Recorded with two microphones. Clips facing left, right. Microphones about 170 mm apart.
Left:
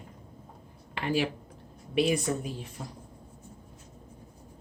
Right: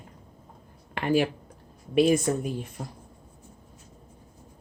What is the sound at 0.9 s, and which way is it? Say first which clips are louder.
A woman's voice: right 5 dB; 50° right (ahead or behind).